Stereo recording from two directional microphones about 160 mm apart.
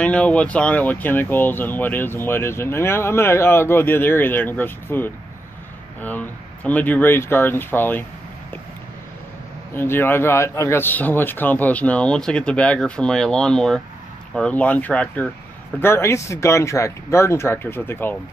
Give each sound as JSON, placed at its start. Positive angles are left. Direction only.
{"t": 0.0, "sound": "speech", "side_deg": 5}
{"t": 9.8, "sound": "speech", "side_deg": 15}